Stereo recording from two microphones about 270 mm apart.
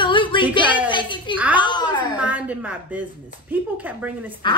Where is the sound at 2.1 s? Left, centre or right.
Centre.